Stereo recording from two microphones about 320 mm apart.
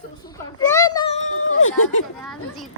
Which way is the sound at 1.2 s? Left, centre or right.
Left.